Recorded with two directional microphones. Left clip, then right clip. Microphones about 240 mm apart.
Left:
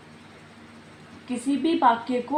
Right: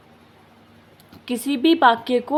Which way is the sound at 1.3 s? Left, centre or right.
Right.